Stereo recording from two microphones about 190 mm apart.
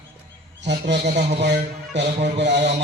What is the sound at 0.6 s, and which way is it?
Speech, 65° right (ahead or behind).